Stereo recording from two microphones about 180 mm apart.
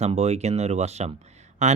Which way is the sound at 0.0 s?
35° right (ahead or behind).